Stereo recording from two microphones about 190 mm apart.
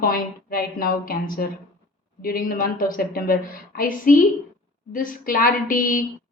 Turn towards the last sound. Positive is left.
turn(degrees=45)  # may be behind; listen again after turning